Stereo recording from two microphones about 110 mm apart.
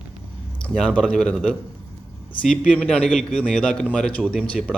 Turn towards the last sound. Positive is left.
turn(degrees=5)  # may be behind; listen again after turning